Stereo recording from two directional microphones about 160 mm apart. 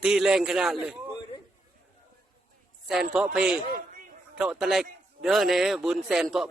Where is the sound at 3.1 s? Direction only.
5° right (ahead or behind).